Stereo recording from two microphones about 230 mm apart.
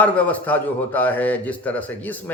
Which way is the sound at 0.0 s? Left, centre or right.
Centre.